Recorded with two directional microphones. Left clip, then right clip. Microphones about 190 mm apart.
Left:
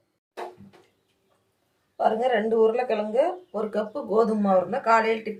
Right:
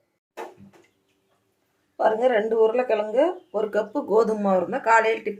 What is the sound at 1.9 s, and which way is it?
Speech, 40° right (ahead or behind).